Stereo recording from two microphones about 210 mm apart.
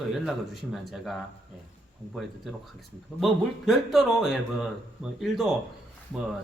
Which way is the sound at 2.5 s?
Centre (ahead or behind).